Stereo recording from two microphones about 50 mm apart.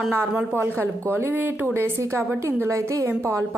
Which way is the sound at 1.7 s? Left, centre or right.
Right.